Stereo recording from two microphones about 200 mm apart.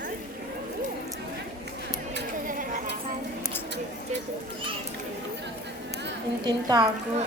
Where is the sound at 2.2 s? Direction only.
45° right (ahead or behind).